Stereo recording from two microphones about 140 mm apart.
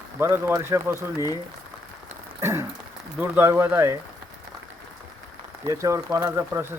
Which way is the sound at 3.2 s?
15° right (ahead or behind).